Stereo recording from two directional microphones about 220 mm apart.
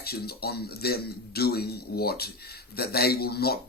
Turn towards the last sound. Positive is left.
turn(degrees=45)  # may be behind; listen again after turning